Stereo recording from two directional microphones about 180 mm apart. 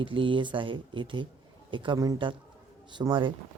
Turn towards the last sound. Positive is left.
turn(degrees=-25)  # may be behind; listen again after turning